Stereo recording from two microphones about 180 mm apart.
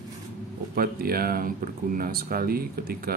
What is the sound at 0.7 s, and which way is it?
Speech, 55° right (ahead or behind).